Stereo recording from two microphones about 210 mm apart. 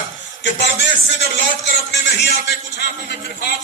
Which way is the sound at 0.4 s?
60° left (ahead or behind).